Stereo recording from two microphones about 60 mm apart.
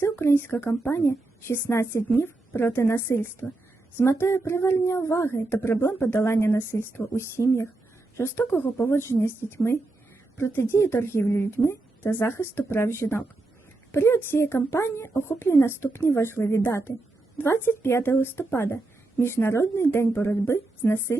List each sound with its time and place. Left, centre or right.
0.0 s speech: left
0.5 s a woman's voice: left
8.2 s a woman's voice: left